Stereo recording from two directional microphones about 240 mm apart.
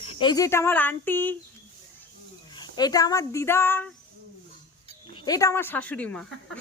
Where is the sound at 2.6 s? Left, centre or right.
Centre.